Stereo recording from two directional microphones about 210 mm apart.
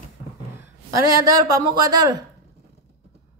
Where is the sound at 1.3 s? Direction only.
15° right (ahead or behind).